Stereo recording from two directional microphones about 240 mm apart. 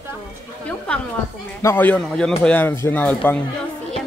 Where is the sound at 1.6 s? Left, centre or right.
Centre.